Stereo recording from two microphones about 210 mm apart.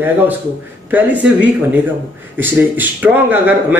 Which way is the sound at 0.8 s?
10° right (ahead or behind).